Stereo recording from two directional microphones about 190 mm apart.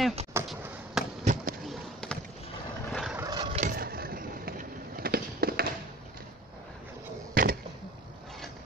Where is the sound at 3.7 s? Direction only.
55° right (ahead or behind).